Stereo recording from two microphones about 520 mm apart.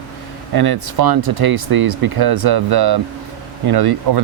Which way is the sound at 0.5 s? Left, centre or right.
Right.